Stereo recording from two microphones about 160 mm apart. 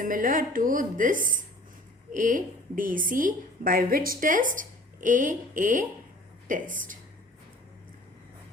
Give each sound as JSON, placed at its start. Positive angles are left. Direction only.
{"t": 0.0, "sound": "a woman's voice", "side_deg": -60}